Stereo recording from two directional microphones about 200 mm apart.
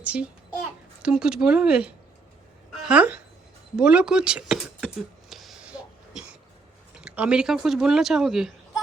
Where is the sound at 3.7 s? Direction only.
5° right (ahead or behind).